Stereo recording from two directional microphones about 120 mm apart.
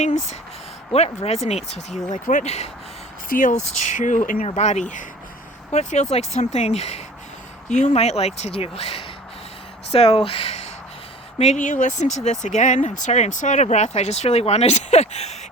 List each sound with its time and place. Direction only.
0.0 s speech: 75° left (ahead or behind)
0.9 s speech: 60° left (ahead or behind)
2.1 s speech: 90° left; by 2.6 s 65° left (ahead or behind)
3.4 s speech: 90° left
5.7 s speech: 70° left (ahead or behind)
7.7 s speech: 75° left (ahead or behind); by 10.7 s 55° left (ahead or behind)
11.3 s speech: 80° left